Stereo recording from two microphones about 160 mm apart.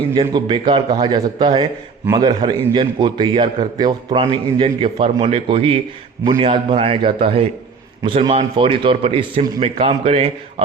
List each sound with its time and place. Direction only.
0.1 s a man's voice: 30° right (ahead or behind)